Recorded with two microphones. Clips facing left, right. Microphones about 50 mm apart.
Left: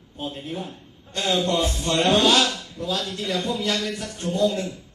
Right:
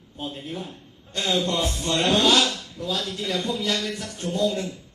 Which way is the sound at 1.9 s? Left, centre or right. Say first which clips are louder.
Left 2 dB; left.